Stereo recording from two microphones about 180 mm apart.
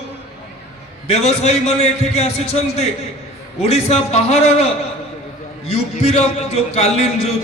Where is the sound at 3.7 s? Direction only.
35° left (ahead or behind).